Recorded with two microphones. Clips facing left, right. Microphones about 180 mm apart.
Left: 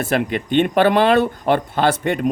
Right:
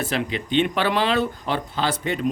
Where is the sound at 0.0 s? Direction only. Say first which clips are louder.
Left 5 dB; 50° left (ahead or behind).